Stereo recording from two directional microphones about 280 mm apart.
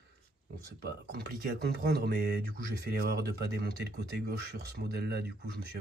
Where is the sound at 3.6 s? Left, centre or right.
Right.